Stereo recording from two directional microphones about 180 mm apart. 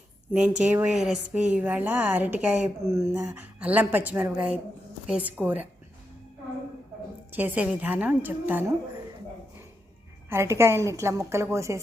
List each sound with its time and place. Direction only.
0.3 s speech: 5° right (ahead or behind)
7.3 s speech: 10° right (ahead or behind)
10.2 s speech: 15° right (ahead or behind)